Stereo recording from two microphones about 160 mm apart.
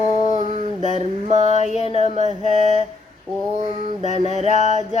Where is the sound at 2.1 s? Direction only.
45° right (ahead or behind).